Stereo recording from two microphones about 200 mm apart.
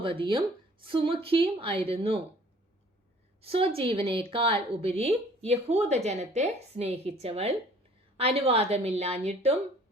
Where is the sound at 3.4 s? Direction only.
30° right (ahead or behind).